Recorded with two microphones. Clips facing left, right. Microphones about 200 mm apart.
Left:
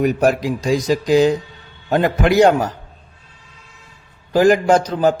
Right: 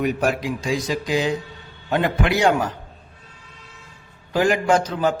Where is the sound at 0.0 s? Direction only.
40° left (ahead or behind).